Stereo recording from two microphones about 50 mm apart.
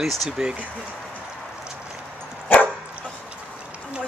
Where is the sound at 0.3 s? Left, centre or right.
Centre.